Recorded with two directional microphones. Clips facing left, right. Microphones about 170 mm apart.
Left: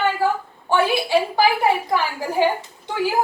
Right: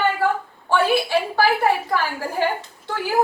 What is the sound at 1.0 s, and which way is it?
A woman's voice, 15° left (ahead or behind).